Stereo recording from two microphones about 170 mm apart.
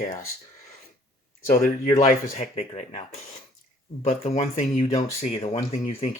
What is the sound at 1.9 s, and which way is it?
Speech, 45° left (ahead or behind).